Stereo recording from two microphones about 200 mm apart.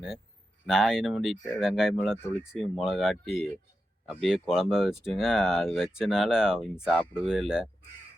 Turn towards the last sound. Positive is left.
turn(degrees=-5)  # may be behind; listen again after turning